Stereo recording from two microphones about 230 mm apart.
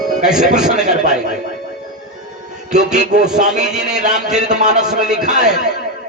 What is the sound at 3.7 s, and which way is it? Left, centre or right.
Speech, centre.